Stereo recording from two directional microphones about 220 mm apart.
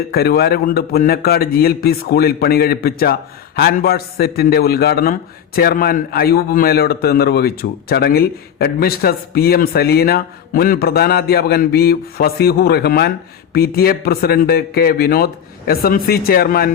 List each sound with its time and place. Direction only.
0.1 s a man's voice: 45° left (ahead or behind)